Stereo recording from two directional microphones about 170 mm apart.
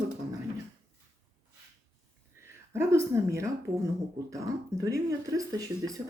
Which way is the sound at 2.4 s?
15° right (ahead or behind).